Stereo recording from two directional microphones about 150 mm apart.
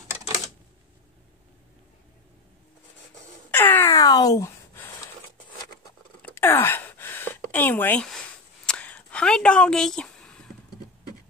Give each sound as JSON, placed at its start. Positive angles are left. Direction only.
{"t": 3.5, "sound": "wail", "side_deg": 15}
{"t": 6.2, "sound": "gasp", "side_deg": 15}
{"t": 8.6, "sound": "a sound", "side_deg": 10}